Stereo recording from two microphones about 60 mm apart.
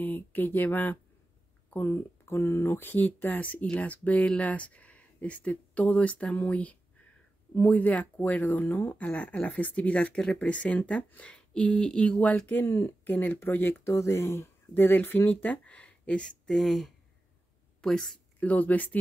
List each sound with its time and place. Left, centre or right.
0.0 s speech: left
13.9 s speech: left
14.7 s speech: left; by 16.5 s centre
16.5 s a woman's voice: centre
18.4 s speech: left